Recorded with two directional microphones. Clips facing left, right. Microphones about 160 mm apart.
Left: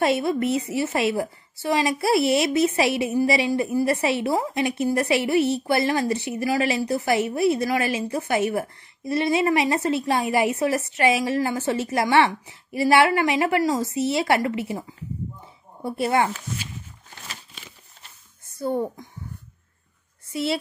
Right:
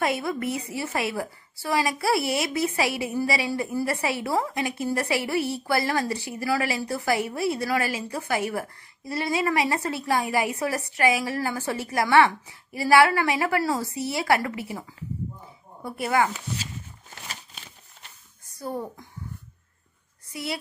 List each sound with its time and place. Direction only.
0.0 s a woman's voice: 25° left (ahead or behind)
18.6 s a woman's voice: 25° left (ahead or behind)